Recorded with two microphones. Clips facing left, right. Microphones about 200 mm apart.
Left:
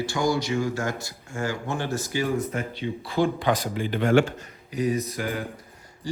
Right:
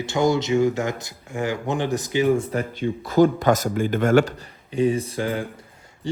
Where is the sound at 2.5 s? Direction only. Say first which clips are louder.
Right 5 dB; 45° right (ahead or behind).